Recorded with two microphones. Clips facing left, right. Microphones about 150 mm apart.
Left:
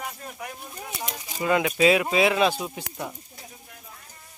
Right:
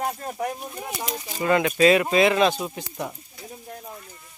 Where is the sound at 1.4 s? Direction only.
5° left (ahead or behind).